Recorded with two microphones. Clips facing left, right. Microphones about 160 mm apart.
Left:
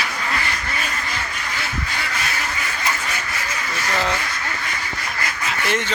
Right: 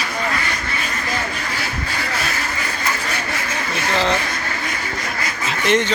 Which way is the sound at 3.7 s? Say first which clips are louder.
Right 4 dB; 25° right (ahead or behind).